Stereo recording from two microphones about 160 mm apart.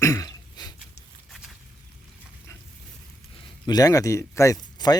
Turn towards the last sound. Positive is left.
turn(degrees=25)  # may be behind; listen again after turning